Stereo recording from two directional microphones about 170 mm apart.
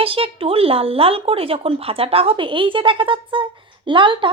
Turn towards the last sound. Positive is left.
turn(degrees=-30)  # may be behind; listen again after turning